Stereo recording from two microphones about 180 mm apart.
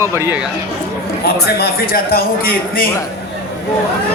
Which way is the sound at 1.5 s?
55° left (ahead or behind).